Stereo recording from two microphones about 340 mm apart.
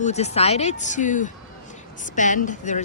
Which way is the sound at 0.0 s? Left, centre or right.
Centre.